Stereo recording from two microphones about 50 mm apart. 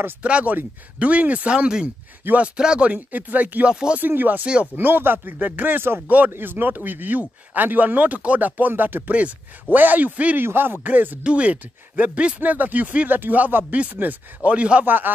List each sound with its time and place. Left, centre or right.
0.2 s speech: right
2.2 s speech: right
2.9 s speech: right
3.6 s speech: right
4.1 s speech: right
10.3 s speech: right
11.2 s speech: right
12.4 s speech: right
13.1 s speech: right